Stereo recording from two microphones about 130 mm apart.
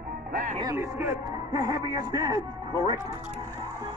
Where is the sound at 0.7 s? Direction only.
20° right (ahead or behind).